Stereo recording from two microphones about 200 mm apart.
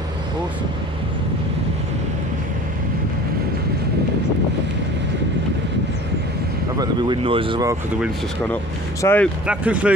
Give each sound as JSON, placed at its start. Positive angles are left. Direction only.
{"t": 6.8, "sound": "speech", "side_deg": -25}
{"t": 9.0, "sound": "speech", "side_deg": 10}
{"t": 9.5, "sound": "speech", "side_deg": -5}